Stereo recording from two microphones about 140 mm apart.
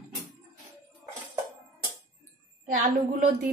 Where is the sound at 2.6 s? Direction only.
70° right (ahead or behind).